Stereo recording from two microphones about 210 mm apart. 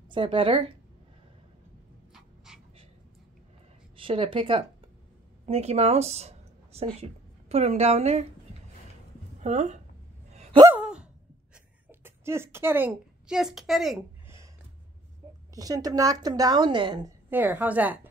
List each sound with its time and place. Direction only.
0.1 s speech: 25° right (ahead or behind)
2.1 s dog: centre (ahead or behind)
3.9 s a woman's voice: 25° right (ahead or behind)
9.4 s speech: 35° right (ahead or behind)
10.3 s a sound: 30° right (ahead or behind)
10.6 s a sound: 10° right (ahead or behind)
14.2 s a sound: 15° right (ahead or behind)
15.5 s a woman's voice: 15° right (ahead or behind)
17.3 s a woman's voice: 10° right (ahead or behind)